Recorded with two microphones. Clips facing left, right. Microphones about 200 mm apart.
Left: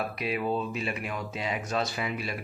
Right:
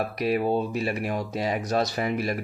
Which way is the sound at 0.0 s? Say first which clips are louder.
Right 6 dB; 40° right (ahead or behind).